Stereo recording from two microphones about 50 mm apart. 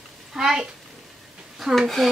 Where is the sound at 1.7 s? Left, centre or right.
Centre.